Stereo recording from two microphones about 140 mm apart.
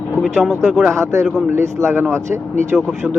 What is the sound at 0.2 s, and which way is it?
Speech, 5° right (ahead or behind).